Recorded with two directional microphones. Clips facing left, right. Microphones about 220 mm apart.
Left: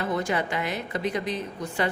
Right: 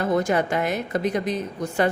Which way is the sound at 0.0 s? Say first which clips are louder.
Right 5 dB; 45° right (ahead or behind).